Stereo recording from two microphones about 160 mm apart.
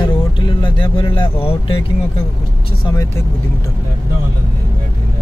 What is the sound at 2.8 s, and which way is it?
Speech, 20° left (ahead or behind).